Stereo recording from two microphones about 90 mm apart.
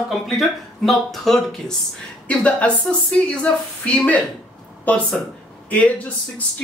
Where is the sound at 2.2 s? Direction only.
15° left (ahead or behind).